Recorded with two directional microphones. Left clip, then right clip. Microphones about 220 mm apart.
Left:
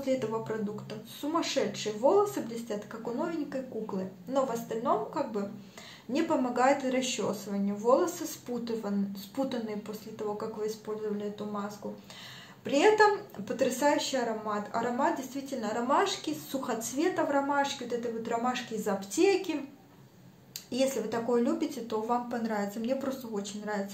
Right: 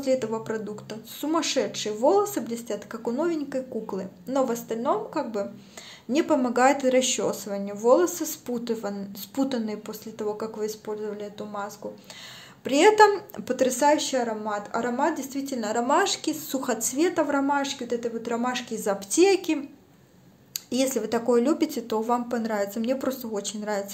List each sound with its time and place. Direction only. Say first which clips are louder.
0.0 s speech: right 5 dB; 45° right (ahead or behind)